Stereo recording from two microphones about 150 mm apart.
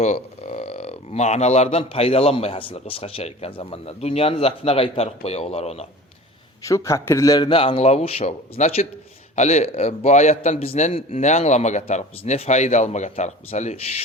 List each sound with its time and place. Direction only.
0.0 s speech: 50° left (ahead or behind)
6.6 s a man's voice: 20° left (ahead or behind); by 14.0 s 45° left (ahead or behind)